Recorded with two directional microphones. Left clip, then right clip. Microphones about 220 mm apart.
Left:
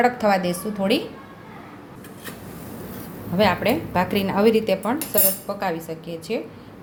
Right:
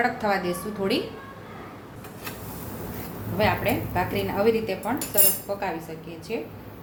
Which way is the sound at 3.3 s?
40° left (ahead or behind).